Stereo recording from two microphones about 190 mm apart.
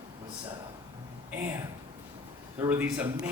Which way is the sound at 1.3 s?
10° right (ahead or behind).